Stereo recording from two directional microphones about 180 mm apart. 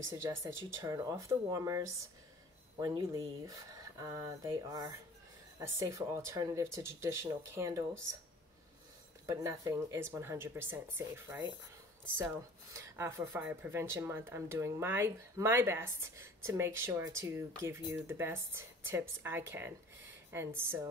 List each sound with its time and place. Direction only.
0.1 s speech: 15° right (ahead or behind)
9.2 s speech: 15° right (ahead or behind)
12.7 s speech: 15° right (ahead or behind)